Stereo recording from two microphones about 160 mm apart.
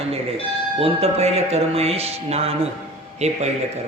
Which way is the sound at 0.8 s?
40° right (ahead or behind).